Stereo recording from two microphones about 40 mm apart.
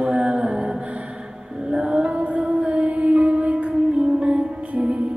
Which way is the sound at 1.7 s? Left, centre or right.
Right.